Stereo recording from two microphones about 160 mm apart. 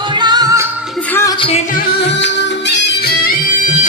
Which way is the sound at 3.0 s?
60° left (ahead or behind).